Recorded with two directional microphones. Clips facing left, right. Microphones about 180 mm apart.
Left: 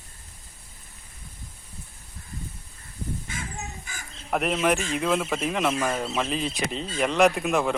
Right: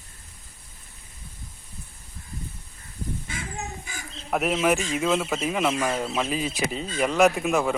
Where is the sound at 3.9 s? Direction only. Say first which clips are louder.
Right 3 dB; 50° left (ahead or behind).